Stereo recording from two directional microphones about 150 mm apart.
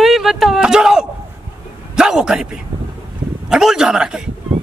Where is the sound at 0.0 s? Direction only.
Centre (ahead or behind).